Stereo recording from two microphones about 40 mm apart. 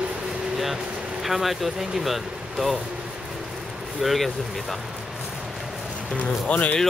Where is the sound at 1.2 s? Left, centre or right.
Centre.